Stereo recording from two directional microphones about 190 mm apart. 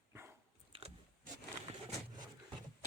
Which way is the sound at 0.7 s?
30° right (ahead or behind).